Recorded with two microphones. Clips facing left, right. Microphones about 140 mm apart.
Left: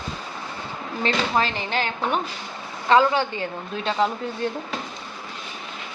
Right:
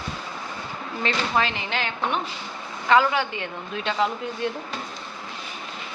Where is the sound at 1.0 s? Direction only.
35° left (ahead or behind).